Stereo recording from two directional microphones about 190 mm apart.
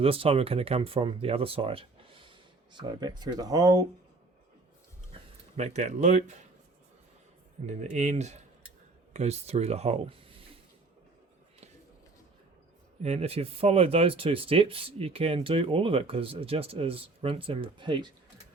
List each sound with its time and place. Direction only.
0.0 s speech: 30° right (ahead or behind)
5.5 s speech: 35° right (ahead or behind)
7.7 s speech: 35° right (ahead or behind)
13.0 s speech: 35° right (ahead or behind)